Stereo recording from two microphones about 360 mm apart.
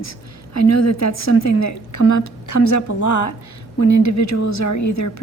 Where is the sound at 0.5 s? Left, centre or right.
Left.